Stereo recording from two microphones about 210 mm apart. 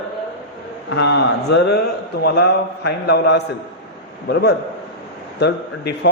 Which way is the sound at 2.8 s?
50° left (ahead or behind).